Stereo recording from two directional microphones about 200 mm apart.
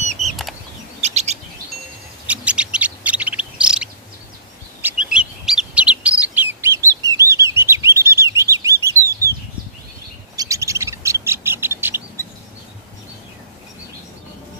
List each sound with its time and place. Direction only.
0.2 s bird flight: centre (ahead or behind)
1.0 s chirp: 35° right (ahead or behind)
2.2 s bird: 5° right (ahead or behind)
4.8 s chirp: 5° right (ahead or behind)
10.3 s bird: 15° right (ahead or behind)